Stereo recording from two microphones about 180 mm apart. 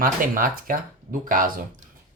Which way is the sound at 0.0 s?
50° right (ahead or behind).